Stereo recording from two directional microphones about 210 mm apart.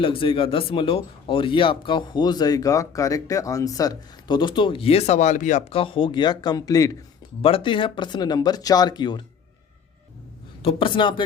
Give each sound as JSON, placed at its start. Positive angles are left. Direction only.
{"t": 0.0, "sound": "speech", "side_deg": 25}
{"t": 10.6, "sound": "speech", "side_deg": 25}